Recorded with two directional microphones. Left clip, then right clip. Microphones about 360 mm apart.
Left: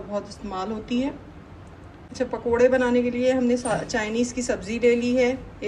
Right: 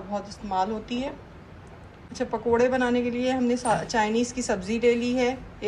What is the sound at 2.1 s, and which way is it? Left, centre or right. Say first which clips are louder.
A woman's voice: left 1 dB; centre.